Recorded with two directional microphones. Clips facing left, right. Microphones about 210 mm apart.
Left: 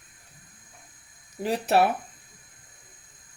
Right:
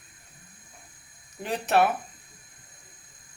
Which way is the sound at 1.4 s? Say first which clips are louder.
Left 1 dB; 35° left (ahead or behind).